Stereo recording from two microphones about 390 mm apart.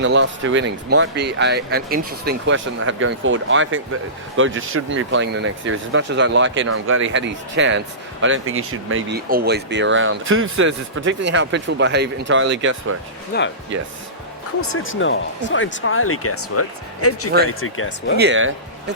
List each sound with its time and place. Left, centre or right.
0.0 s speech: right
13.3 s speech: left
14.6 s speech: left
18.2 s speech: right